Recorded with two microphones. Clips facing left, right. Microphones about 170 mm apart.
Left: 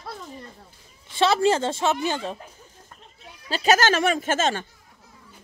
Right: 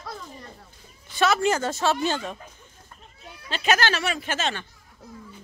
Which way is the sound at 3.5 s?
40° left (ahead or behind).